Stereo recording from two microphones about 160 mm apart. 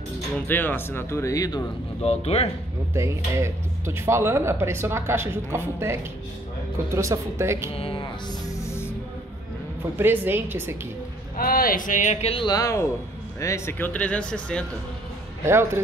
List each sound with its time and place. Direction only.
0.5 s speech: 10° left (ahead or behind)
2.0 s speech: 40° left (ahead or behind)
2.9 s speech: 15° right (ahead or behind)
7.7 s music: 35° left (ahead or behind); by 8.9 s 15° left (ahead or behind)
9.9 s speech: 10° right (ahead or behind)
11.3 s a man's voice: 65° left (ahead or behind); by 14.6 s 5° left (ahead or behind)
15.4 s speech: 15° right (ahead or behind)